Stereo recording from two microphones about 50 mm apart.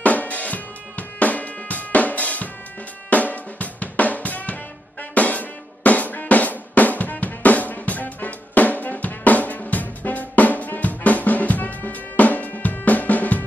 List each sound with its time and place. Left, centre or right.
0.0 s music: left
3.1 s drum: left